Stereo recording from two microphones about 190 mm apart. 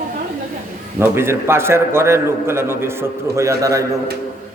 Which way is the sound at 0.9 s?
10° right (ahead or behind).